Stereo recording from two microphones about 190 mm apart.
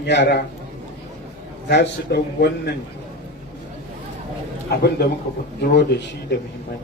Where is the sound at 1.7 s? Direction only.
65° left (ahead or behind).